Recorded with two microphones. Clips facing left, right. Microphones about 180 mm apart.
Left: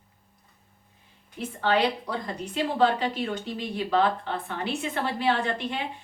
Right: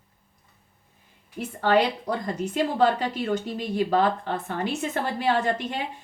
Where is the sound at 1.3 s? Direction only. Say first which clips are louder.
Right 3 dB; 45° right (ahead or behind).